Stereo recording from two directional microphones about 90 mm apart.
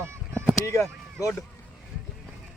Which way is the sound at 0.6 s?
35° left (ahead or behind).